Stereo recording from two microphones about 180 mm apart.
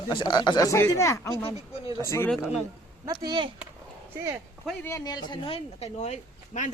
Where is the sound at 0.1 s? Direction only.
25° left (ahead or behind).